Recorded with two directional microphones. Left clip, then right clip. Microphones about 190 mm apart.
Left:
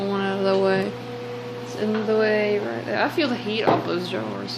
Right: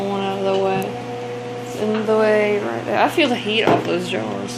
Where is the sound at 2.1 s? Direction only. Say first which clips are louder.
Right 5 dB; 10° left (ahead or behind).